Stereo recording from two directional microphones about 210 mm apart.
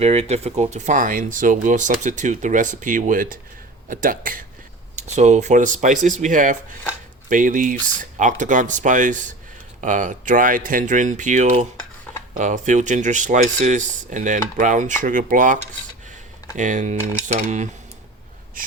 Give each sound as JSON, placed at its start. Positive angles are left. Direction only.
{"t": 0.0, "sound": "speech", "side_deg": -30}
{"t": 16.6, "sound": "speech", "side_deg": -35}